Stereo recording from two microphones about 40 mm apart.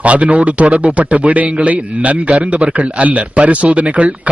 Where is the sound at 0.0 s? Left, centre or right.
Right.